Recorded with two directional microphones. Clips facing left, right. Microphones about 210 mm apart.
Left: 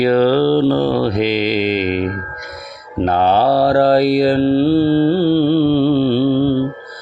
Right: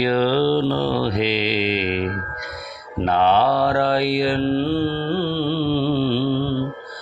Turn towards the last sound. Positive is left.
turn(degrees=45)  # may be behind; listen again after turning